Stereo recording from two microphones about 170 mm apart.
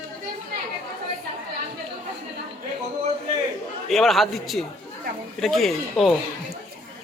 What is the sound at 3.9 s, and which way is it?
A man's voice, centre (ahead or behind).